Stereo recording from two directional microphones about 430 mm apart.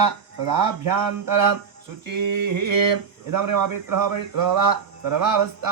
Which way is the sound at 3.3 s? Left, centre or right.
Right.